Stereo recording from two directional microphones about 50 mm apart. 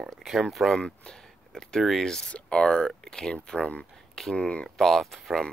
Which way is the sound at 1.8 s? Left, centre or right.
Centre.